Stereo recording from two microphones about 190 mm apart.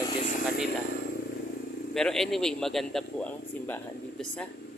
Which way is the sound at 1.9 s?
Centre (ahead or behind).